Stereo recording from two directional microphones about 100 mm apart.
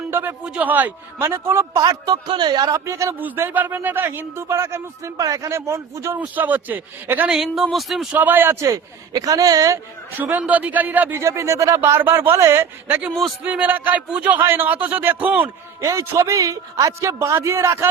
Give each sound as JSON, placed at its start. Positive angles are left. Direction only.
{"t": 0.1, "sound": "a man's voice", "side_deg": -20}
{"t": 1.8, "sound": "speech", "side_deg": -45}
{"t": 3.2, "sound": "speech", "side_deg": -20}
{"t": 6.1, "sound": "speech", "side_deg": -15}
{"t": 7.3, "sound": "speech", "side_deg": -5}
{"t": 8.1, "sound": "speech", "side_deg": -20}
{"t": 8.6, "sound": "a man's voice", "side_deg": -35}
{"t": 10.2, "sound": "speech", "side_deg": -20}
{"t": 11.2, "sound": "a man's voice", "side_deg": -30}
{"t": 13.4, "sound": "speech", "side_deg": -15}
{"t": 15.8, "sound": "a man's voice", "side_deg": -30}